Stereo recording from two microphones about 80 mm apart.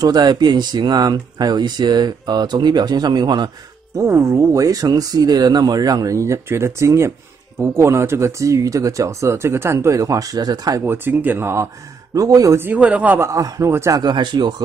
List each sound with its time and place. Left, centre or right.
0.0 s speech: right
3.9 s speech: right
10.8 s speech: right
12.1 s speech: right
12.5 s speech: right
13.2 s speech: right
13.9 s speech: right